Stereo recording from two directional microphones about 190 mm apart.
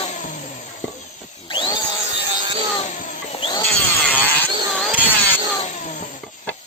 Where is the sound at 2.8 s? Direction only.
40° left (ahead or behind).